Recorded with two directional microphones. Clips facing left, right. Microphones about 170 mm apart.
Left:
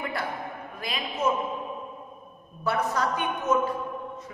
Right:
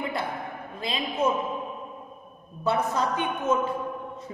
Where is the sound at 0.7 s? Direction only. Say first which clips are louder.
Right 4 dB; 25° right (ahead or behind).